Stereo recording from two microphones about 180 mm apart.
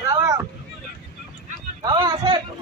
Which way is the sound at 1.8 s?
25° right (ahead or behind).